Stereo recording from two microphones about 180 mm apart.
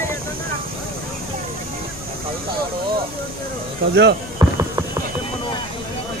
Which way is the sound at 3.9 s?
75° right (ahead or behind).